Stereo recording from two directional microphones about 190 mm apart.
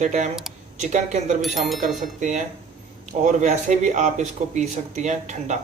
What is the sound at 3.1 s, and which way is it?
A man's voice, 40° right (ahead or behind).